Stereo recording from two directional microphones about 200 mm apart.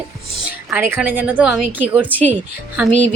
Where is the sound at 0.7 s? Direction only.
10° right (ahead or behind).